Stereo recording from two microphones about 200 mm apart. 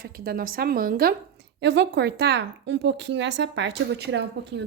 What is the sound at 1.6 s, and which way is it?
A woman's voice, 60° right (ahead or behind).